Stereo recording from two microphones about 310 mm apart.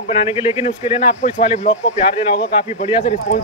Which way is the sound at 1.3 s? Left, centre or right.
Left.